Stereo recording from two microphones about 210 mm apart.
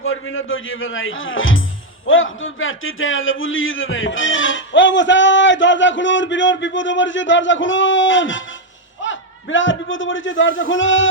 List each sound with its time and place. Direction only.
0.0 s a man's voice: 70° left (ahead or behind)